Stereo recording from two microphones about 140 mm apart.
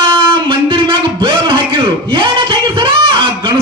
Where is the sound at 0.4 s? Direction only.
40° right (ahead or behind).